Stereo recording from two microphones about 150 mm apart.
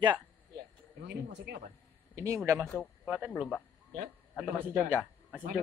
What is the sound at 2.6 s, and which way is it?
Speech, 10° left (ahead or behind).